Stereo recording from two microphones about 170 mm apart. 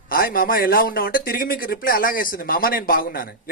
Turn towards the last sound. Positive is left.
turn(degrees=60)  # may be behind; listen again after turning